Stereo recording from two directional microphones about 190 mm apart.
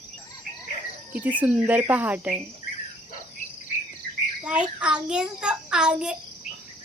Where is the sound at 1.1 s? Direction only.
10° right (ahead or behind).